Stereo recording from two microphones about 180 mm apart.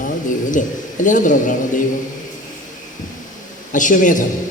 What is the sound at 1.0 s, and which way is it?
Speech, 45° left (ahead or behind).